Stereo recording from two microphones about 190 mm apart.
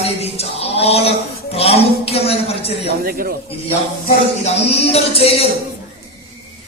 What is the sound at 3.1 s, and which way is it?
Speech, 50° right (ahead or behind).